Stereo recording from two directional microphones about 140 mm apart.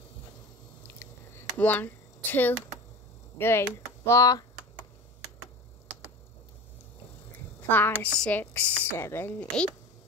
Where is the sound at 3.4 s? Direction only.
15° left (ahead or behind).